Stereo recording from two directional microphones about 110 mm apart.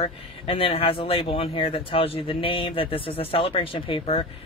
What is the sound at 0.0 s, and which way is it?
Speech, 60° left (ahead or behind).